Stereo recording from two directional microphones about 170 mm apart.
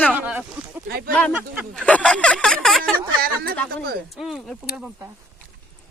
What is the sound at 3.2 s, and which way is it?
Speech, 60° right (ahead or behind).